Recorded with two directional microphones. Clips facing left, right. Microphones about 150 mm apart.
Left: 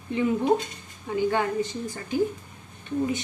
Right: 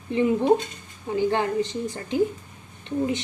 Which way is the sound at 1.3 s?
25° right (ahead or behind).